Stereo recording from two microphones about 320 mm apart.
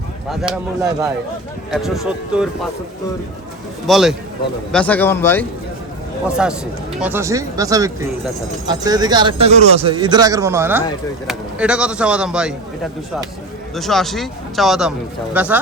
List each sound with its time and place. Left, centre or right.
0.3 s speech: centre
3.8 s speech: centre
13.7 s speech: centre